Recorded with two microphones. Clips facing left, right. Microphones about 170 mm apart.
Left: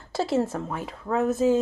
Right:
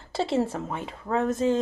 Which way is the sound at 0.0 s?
Centre (ahead or behind).